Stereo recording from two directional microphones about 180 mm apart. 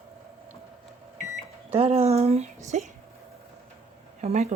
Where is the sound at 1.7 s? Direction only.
35° right (ahead or behind).